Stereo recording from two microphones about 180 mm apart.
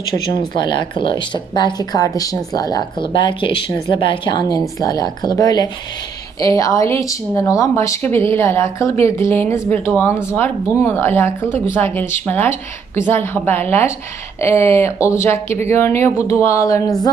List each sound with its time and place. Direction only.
0.5 s speech: 25° left (ahead or behind)